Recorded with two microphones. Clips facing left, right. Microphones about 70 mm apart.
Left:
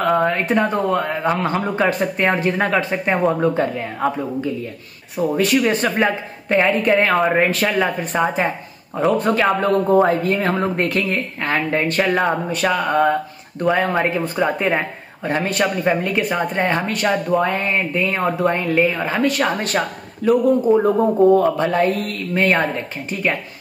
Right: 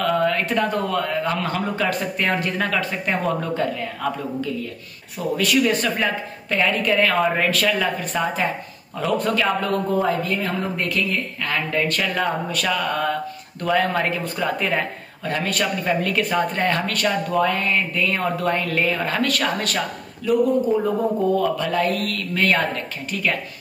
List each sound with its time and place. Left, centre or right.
0.0 s a sound: left
0.3 s speech: left
18.8 s speech: centre; by 19.8 s left
20.2 s speech: left
20.7 s speech: centre
21.4 s speech: left